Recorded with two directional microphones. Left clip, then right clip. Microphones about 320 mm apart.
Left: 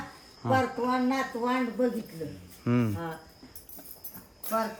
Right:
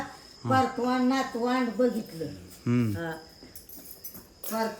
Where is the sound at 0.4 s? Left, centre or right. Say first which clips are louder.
Right 1 dB; centre.